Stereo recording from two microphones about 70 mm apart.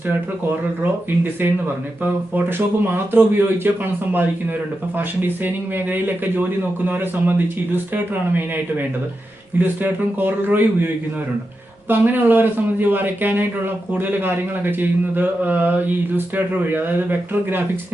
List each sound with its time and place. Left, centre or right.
0.8 s speech: right
5.9 s speech: right
9.6 s speech: right
11.9 s speech: right